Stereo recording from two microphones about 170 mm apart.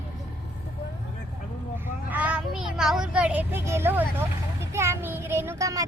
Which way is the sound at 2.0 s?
10° right (ahead or behind).